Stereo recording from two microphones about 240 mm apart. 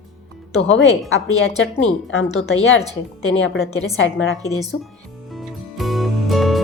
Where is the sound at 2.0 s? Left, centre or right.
Left.